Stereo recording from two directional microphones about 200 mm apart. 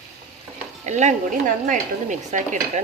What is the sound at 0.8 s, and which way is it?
Dishes, 35° right (ahead or behind).